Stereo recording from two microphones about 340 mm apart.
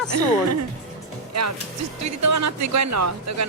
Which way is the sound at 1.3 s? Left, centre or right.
Right.